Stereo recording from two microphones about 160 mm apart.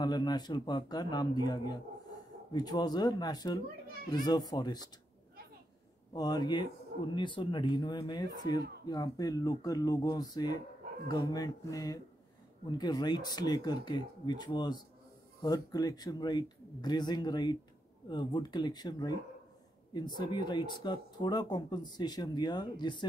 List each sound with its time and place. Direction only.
0.0 s speech: 25° left (ahead or behind)
3.8 s children playing: 70° right (ahead or behind)
4.1 s speech: 25° left (ahead or behind)
6.1 s speech: 25° left (ahead or behind)
20.2 s speech: 30° left (ahead or behind)